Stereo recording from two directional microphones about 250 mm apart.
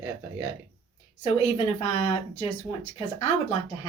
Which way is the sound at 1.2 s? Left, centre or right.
Left.